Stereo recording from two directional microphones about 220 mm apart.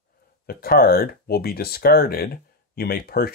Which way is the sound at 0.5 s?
40° left (ahead or behind).